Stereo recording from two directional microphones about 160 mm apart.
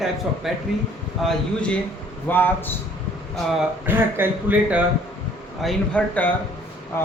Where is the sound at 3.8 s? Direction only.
15° right (ahead or behind).